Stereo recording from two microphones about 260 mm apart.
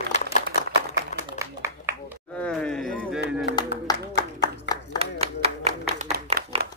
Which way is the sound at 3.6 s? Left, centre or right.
Centre.